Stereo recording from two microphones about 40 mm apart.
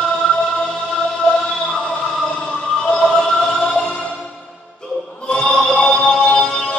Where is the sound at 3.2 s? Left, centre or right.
Centre.